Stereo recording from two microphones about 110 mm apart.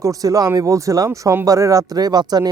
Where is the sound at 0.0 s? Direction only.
30° right (ahead or behind).